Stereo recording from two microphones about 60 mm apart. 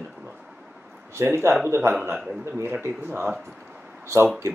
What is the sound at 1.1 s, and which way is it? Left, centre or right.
Speech, right.